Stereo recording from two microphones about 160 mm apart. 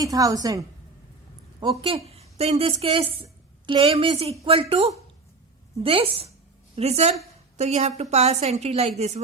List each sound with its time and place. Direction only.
0.0 s a woman's voice: 20° right (ahead or behind)
1.8 s a woman's voice: 35° right (ahead or behind)